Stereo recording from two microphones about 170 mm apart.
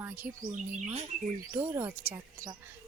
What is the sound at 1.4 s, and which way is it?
Speech, 15° right (ahead or behind).